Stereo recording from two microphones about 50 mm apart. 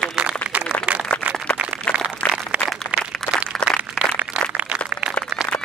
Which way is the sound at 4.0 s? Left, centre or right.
Right.